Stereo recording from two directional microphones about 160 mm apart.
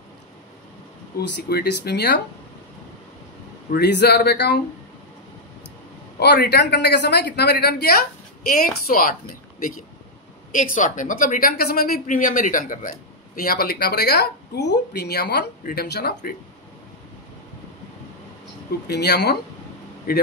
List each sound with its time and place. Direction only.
1.2 s speech: 90° left
3.7 s speech: 90° left
6.1 s speech: 90° left
8.5 s speech: 65° left (ahead or behind)
13.4 s speech: 70° left (ahead or behind)
18.9 s speech: 90° left
20.1 s speech: 65° left (ahead or behind)